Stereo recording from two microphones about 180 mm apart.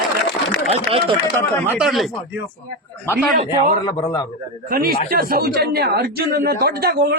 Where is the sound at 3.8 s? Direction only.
25° left (ahead or behind).